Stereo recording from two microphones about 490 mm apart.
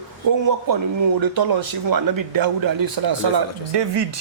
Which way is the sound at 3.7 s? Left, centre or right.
Right.